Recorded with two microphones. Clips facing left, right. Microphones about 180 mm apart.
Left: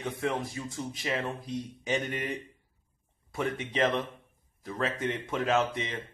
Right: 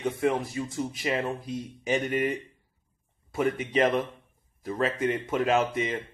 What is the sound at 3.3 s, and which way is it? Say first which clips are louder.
Speech: right 5 dB; centre (ahead or behind).